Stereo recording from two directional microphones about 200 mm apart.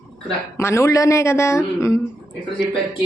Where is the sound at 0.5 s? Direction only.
15° left (ahead or behind).